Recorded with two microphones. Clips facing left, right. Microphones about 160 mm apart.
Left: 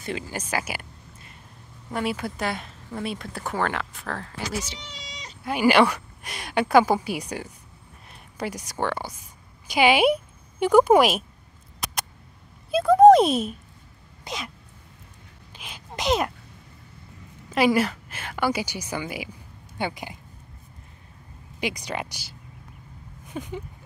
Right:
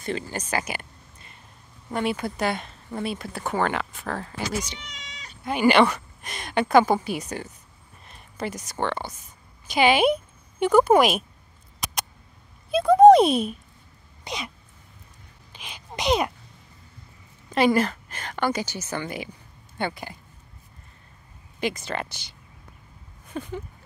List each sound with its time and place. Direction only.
0.0 s speech: 5° left (ahead or behind)
1.9 s speech: centre (ahead or behind)
4.5 s speech: 5° left (ahead or behind)
4.7 s speech: 35° left (ahead or behind)
5.4 s speech: 5° left (ahead or behind)
12.7 s speech: centre (ahead or behind)
14.2 s a sound: centre (ahead or behind)
15.5 s speech: 5° left (ahead or behind)
17.5 s speech: 5° left (ahead or behind)
21.5 s speech: 15° left (ahead or behind)
23.3 s speech: 10° left (ahead or behind)